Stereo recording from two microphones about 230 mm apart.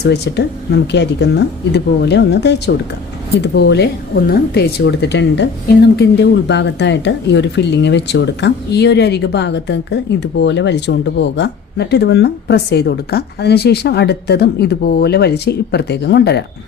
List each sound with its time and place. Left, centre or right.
0.0 s speech: left